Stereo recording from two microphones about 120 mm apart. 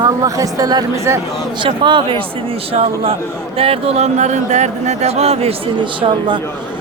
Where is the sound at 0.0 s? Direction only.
30° right (ahead or behind).